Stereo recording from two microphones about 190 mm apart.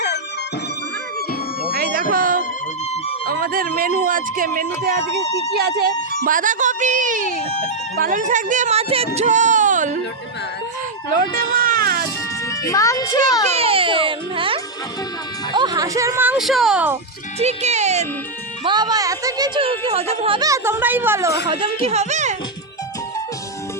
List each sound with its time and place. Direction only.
1.7 s music: 50° right (ahead or behind)
2.1 s speech: 45° right (ahead or behind)
5.3 s speech: 35° left (ahead or behind)
5.8 s a woman's voice: 50° right (ahead or behind)
11.8 s music: 55° right (ahead or behind)
12.5 s a child's voice: 15° left (ahead or behind)
13.5 s a child's voice: 30° right (ahead or behind); by 17.0 s 10° right (ahead or behind)
17.4 s a woman's voice: 35° right (ahead or behind)
18.6 s speech: 20° right (ahead or behind)
21.5 s a woman's voice: 30° right (ahead or behind)